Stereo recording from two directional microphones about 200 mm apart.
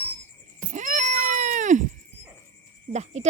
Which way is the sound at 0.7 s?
40° right (ahead or behind).